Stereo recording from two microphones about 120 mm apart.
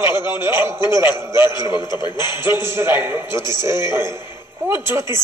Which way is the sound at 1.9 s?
35° left (ahead or behind).